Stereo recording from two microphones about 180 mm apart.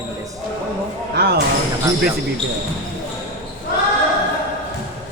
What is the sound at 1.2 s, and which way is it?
Speech, 65° right (ahead or behind).